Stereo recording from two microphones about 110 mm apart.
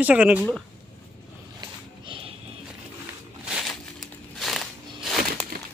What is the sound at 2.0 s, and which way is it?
Music, 55° right (ahead or behind).